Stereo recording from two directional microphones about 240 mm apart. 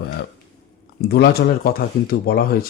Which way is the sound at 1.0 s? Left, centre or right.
Left.